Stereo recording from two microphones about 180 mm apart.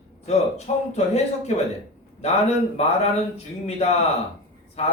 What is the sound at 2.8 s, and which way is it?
A man's voice, 35° left (ahead or behind).